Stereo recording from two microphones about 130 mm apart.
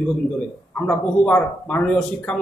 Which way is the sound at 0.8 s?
10° left (ahead or behind).